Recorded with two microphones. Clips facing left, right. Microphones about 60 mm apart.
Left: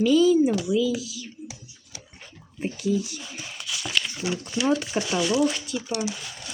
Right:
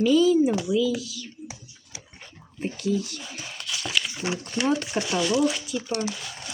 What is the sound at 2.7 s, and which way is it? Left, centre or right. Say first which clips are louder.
Speech: left 1 dB; centre.